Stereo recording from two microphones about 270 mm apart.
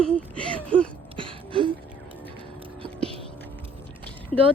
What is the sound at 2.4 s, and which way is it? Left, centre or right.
Whispering, centre.